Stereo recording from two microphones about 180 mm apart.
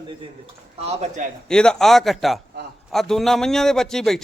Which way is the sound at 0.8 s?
35° right (ahead or behind).